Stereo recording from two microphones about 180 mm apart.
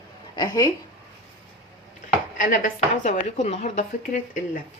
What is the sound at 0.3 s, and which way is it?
Speech, 20° left (ahead or behind).